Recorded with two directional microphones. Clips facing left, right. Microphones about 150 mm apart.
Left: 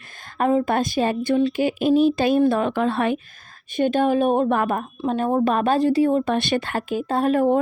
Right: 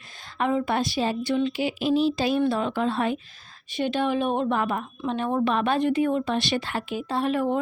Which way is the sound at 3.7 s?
50° left (ahead or behind).